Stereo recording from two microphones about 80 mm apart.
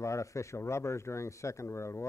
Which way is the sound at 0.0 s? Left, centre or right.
Left.